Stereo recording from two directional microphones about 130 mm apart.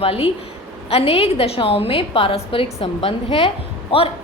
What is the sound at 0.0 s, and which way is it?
A woman's voice, 50° left (ahead or behind).